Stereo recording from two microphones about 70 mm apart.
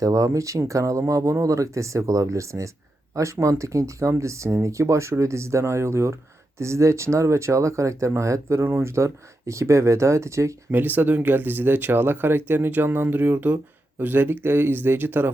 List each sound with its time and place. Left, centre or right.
0.0 s speech: right
10.7 s speech: right